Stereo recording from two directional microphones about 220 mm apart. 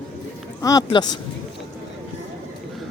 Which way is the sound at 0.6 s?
15° left (ahead or behind).